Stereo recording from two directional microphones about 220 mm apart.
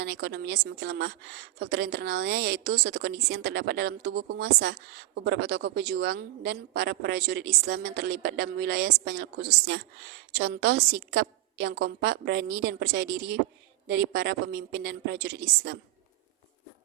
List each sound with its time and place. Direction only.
0.0 s a woman's voice: 50° right (ahead or behind)